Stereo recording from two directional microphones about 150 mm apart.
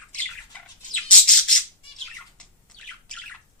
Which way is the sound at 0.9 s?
5° left (ahead or behind).